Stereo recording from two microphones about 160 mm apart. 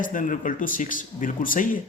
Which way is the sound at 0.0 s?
55° left (ahead or behind).